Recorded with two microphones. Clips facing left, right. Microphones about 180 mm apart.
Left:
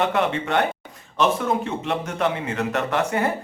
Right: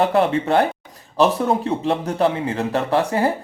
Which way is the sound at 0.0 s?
35° right (ahead or behind).